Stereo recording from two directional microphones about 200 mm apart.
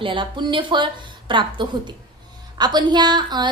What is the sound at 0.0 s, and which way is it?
A woman's voice, 25° right (ahead or behind).